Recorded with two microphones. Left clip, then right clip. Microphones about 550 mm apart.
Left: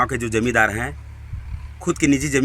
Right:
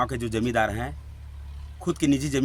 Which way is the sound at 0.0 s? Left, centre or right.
Right.